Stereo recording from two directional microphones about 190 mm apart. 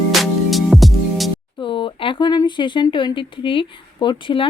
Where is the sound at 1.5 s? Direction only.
25° left (ahead or behind).